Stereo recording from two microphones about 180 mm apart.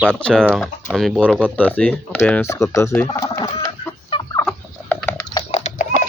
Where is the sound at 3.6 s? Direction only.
30° left (ahead or behind).